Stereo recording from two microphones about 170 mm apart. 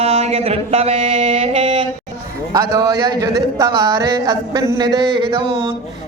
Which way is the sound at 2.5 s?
20° right (ahead or behind).